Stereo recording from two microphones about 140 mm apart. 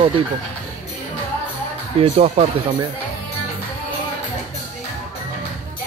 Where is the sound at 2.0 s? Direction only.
45° right (ahead or behind).